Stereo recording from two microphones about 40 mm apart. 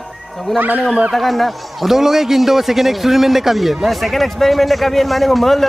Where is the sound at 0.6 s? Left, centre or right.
Right.